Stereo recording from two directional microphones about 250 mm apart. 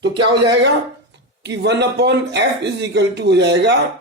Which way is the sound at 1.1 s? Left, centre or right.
Right.